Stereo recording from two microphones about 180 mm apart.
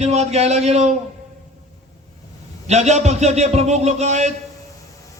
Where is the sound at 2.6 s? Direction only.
40° right (ahead or behind).